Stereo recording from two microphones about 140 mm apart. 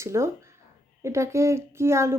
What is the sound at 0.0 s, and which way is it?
A woman's voice, 20° right (ahead or behind).